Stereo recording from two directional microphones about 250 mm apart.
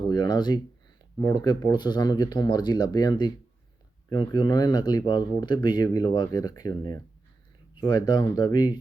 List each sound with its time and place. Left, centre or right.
0.1 s speech: centre